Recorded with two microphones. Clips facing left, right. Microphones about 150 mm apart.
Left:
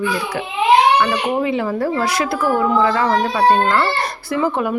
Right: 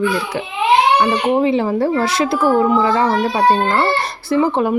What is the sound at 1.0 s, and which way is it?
A woman's voice, 30° right (ahead or behind).